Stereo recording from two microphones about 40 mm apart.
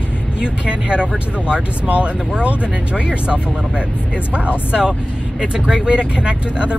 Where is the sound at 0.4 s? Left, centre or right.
Right.